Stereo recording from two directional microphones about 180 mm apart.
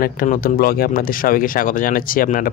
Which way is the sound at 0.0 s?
55° left (ahead or behind).